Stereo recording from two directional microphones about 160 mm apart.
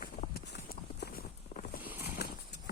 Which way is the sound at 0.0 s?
65° left (ahead or behind).